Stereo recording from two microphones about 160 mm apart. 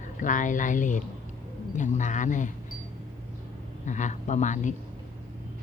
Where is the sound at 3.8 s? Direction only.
50° left (ahead or behind).